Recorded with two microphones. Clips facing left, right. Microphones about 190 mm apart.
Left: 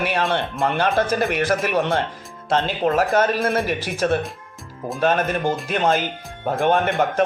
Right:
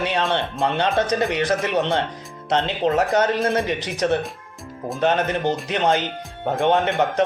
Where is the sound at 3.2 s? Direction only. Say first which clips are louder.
Even; 20° right (ahead or behind).